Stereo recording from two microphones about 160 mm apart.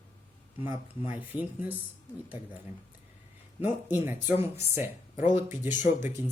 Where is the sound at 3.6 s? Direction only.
15° right (ahead or behind).